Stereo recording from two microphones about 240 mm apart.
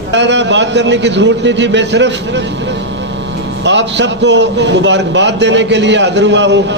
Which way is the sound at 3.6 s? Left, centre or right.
Right.